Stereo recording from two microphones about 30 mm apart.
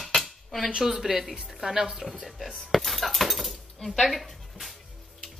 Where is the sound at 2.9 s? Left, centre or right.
Centre.